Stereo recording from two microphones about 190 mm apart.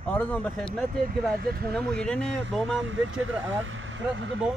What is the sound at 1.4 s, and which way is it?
Speech, 55° right (ahead or behind).